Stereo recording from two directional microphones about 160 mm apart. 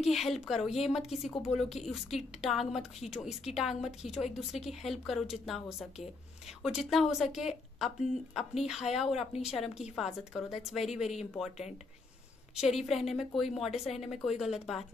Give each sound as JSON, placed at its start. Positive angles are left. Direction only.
{"t": 0.0, "sound": "a woman's voice", "side_deg": 0}
{"t": 12.5, "sound": "speech", "side_deg": 0}